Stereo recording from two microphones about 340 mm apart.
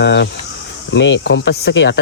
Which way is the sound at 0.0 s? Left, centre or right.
Left.